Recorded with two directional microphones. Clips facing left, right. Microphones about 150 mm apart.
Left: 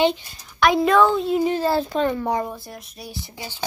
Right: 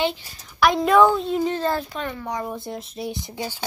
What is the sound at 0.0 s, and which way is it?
Speech, 20° left (ahead or behind).